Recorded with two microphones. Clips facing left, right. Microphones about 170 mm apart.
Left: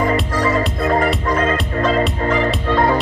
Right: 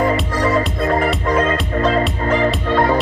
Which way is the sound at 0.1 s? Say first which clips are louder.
Even; centre (ahead or behind).